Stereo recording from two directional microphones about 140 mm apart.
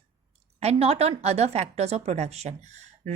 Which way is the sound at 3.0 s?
50° right (ahead or behind).